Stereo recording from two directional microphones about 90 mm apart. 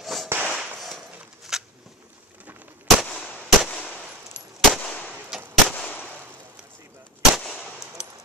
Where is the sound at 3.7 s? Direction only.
15° left (ahead or behind).